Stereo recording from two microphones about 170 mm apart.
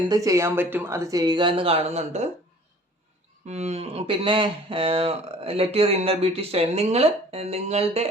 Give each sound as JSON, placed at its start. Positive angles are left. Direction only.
{"t": 0.1, "sound": "speech", "side_deg": -20}
{"t": 3.4, "sound": "speech", "side_deg": -40}